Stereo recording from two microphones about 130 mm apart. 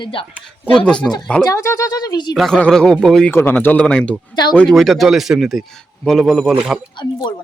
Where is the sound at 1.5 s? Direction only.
25° left (ahead or behind).